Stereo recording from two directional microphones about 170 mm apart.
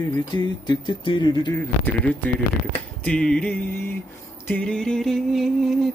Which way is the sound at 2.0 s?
10° left (ahead or behind).